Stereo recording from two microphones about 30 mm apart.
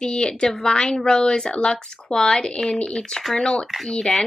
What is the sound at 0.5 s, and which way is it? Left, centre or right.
A woman's voice, centre.